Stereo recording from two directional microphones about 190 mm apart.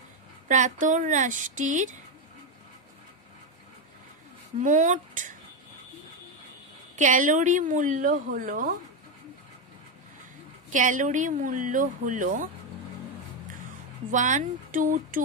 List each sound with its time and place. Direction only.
0.5 s speech: 40° right (ahead or behind)
4.6 s speech: 40° right (ahead or behind)
7.0 s speech: 45° right (ahead or behind)
10.7 s speech: 40° right (ahead or behind)
14.1 s speech: 40° right (ahead or behind)